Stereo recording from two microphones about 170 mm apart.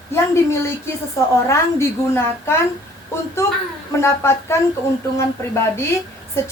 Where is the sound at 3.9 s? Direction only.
15° left (ahead or behind).